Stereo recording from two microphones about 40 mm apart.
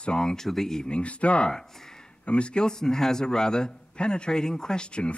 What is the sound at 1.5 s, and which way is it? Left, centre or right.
Speech, centre.